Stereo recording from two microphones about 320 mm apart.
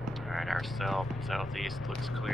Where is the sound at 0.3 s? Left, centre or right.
Centre.